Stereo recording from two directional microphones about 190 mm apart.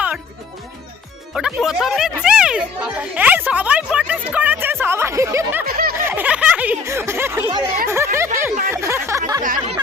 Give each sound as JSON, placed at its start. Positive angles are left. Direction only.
{"t": 1.3, "sound": "speech", "side_deg": 0}
{"t": 5.6, "sound": "snicker", "side_deg": -50}
{"t": 6.1, "sound": "speech", "side_deg": -10}
{"t": 7.9, "sound": "a sound", "side_deg": -15}
{"t": 9.4, "sound": "speech", "side_deg": -45}